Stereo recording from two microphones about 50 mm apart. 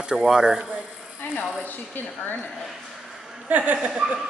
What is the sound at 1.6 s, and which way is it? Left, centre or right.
Speech, left.